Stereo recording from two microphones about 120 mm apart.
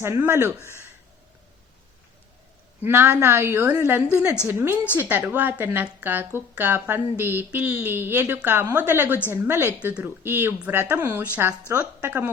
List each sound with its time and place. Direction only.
0.0 s speech: 20° right (ahead or behind)
2.8 s a woman's voice: 20° right (ahead or behind)